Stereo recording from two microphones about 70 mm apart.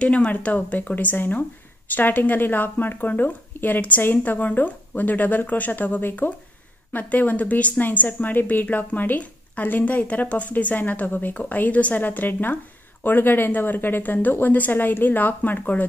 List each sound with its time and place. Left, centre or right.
0.0 s a woman's voice: centre